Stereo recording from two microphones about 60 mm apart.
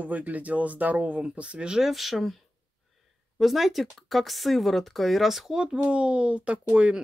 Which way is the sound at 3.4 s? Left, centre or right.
Centre.